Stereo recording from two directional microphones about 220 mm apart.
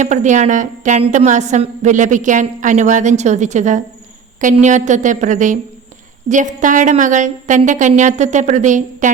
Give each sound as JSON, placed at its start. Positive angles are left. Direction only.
{"t": 0.0, "sound": "a woman's voice", "side_deg": -35}